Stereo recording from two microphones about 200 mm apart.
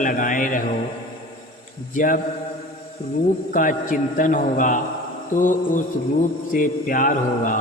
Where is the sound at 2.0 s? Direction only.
45° left (ahead or behind).